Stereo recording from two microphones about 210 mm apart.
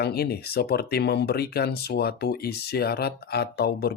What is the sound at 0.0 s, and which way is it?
Speech, 50° left (ahead or behind).